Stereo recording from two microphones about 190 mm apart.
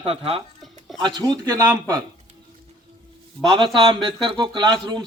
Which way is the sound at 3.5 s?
25° right (ahead or behind).